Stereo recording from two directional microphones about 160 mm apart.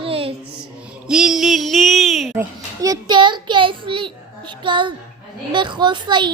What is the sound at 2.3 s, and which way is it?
Speech, 20° right (ahead or behind).